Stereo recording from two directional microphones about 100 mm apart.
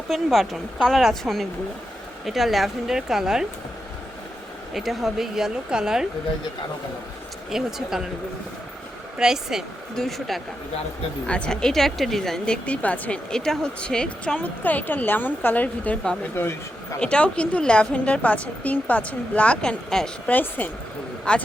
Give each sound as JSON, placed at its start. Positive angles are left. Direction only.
{"t": 0.1, "sound": "speech", "side_deg": 0}
{"t": 4.7, "sound": "speech", "side_deg": 0}
{"t": 7.5, "sound": "speech", "side_deg": -5}
{"t": 9.1, "sound": "speech", "side_deg": -5}
{"t": 20.3, "sound": "speech", "side_deg": 20}